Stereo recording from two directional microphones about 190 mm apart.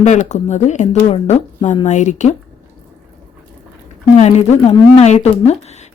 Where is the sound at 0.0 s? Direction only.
40° left (ahead or behind).